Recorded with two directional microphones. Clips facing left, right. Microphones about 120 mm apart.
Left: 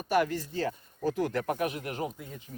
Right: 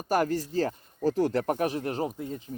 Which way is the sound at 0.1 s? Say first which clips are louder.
Right 2 dB; 40° right (ahead or behind).